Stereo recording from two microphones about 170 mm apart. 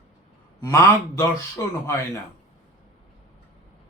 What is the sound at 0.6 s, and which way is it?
A man's voice, 20° left (ahead or behind).